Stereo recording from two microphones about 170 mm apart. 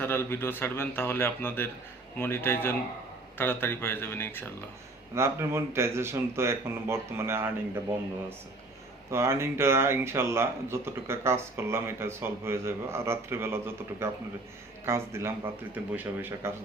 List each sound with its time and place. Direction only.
0.0 s a man's voice: 15° left (ahead or behind)
5.1 s speech: 15° right (ahead or behind)
9.0 s speech: 15° right (ahead or behind)